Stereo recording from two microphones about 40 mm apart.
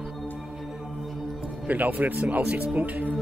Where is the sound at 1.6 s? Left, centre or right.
Right.